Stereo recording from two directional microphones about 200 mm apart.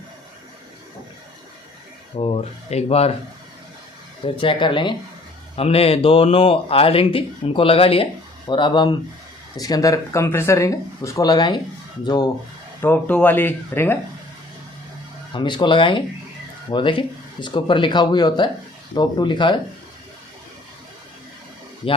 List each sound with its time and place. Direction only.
2.1 s speech: 30° left (ahead or behind)
4.2 s a man's voice: 25° left (ahead or behind)
12.8 s speech: 10° left (ahead or behind)
15.3 s a man's voice: 25° left (ahead or behind)